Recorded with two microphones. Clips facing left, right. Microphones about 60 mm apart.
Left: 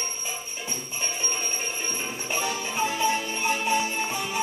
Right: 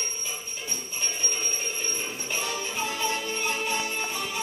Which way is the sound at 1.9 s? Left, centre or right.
Left.